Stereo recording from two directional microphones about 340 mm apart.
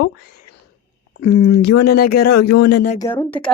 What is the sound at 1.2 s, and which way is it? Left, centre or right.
Speech, left.